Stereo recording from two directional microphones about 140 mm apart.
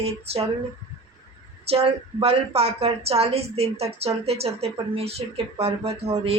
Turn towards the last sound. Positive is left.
turn(degrees=-45)  # may be behind; listen again after turning